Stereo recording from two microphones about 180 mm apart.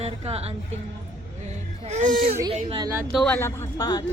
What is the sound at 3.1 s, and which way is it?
Speech, centre (ahead or behind).